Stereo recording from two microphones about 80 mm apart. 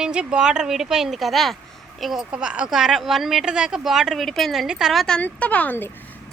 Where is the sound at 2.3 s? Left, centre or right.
Centre.